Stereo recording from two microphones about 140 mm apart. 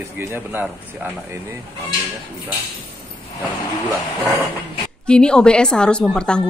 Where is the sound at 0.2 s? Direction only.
15° right (ahead or behind).